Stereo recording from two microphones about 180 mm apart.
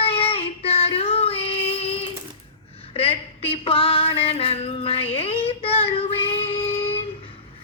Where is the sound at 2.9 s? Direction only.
30° left (ahead or behind).